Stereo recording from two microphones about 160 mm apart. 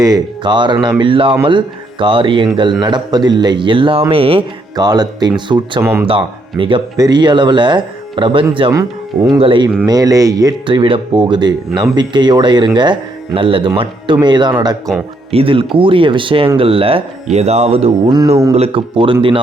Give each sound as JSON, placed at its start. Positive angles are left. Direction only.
{"t": 0.0, "sound": "speech", "side_deg": -25}
{"t": 5.8, "sound": "speech", "side_deg": -10}
{"t": 6.1, "sound": "speech", "side_deg": -35}
{"t": 9.4, "sound": "speech", "side_deg": -30}
{"t": 18.1, "sound": "speech", "side_deg": -20}
{"t": 18.5, "sound": "speech", "side_deg": -35}